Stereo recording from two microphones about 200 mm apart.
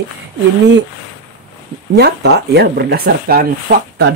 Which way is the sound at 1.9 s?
55° right (ahead or behind).